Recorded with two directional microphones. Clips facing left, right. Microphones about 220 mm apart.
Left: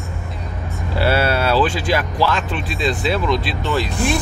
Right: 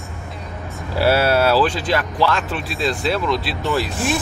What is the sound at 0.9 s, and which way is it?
Speech, 5° right (ahead or behind).